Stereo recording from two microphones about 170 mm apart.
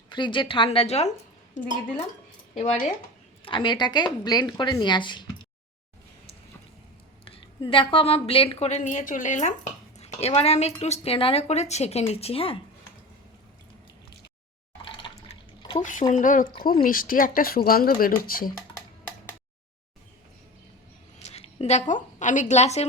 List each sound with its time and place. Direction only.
0.1 s a woman's voice: 30° left (ahead or behind); by 2.0 s 50° left (ahead or behind)
3.4 s a woman's voice: 30° left (ahead or behind)
7.3 s a woman's voice: 30° left (ahead or behind)
15.0 s water: 25° left (ahead or behind)
15.8 s speech: 50° left (ahead or behind)
21.2 s a woman's voice: 40° left (ahead or behind)